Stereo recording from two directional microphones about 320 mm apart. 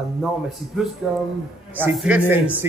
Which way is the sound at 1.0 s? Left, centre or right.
Centre.